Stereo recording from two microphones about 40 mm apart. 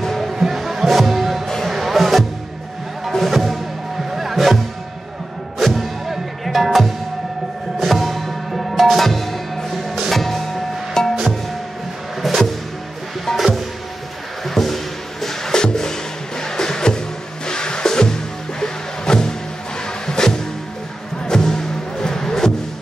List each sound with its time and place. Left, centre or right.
0.0 s music: centre
5.6 s music: centre
11.0 s music: centre
12.2 s music: centre
14.4 s a sound: centre
15.2 s music: centre